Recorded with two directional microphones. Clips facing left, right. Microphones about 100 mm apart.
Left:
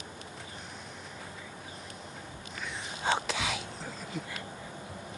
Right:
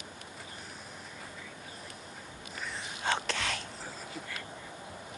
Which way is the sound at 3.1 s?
10° left (ahead or behind).